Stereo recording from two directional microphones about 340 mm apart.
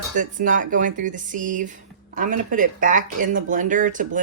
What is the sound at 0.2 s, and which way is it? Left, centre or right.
Speech, right.